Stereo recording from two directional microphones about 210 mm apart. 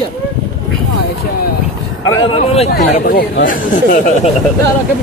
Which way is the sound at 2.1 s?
25° left (ahead or behind).